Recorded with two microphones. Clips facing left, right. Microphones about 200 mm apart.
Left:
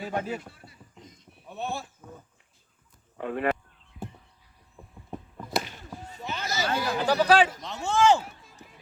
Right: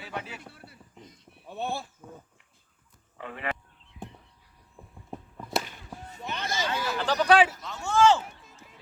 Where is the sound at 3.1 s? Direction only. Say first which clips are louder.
Left 9 dB; 50° left (ahead or behind).